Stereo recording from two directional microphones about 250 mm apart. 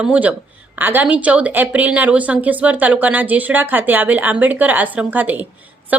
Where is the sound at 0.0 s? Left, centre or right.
Centre.